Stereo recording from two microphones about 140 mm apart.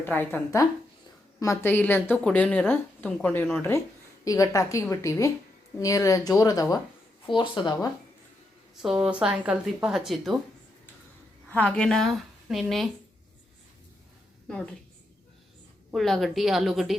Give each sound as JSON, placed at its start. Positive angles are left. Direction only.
{"t": 0.0, "sound": "a woman's voice", "side_deg": 15}
{"t": 8.7, "sound": "a woman's voice", "side_deg": 0}
{"t": 11.4, "sound": "a woman's voice", "side_deg": 10}
{"t": 14.4, "sound": "a woman's voice", "side_deg": 5}
{"t": 15.9, "sound": "a woman's voice", "side_deg": 0}